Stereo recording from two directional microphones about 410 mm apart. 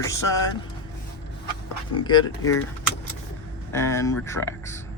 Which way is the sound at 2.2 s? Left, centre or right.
Left.